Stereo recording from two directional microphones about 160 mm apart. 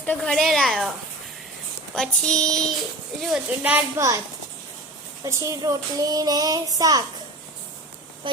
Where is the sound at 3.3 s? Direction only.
10° right (ahead or behind).